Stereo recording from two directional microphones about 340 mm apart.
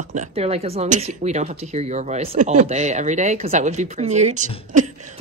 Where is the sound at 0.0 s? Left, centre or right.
Right.